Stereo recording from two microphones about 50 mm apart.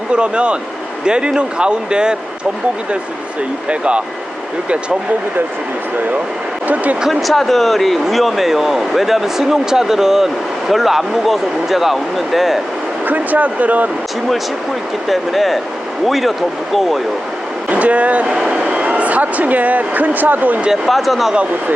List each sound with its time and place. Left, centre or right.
0.1 s speech: right
3.7 s speech: right
7.1 s speech: centre
13.1 s speech: right
15.0 s speech: centre
17.7 s speech: right
18.3 s speech: centre
18.5 s speech: right
20.8 s speech: centre